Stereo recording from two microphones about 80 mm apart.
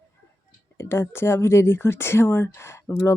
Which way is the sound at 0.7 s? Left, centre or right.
Left.